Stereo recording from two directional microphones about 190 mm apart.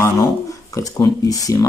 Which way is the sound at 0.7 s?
20° left (ahead or behind).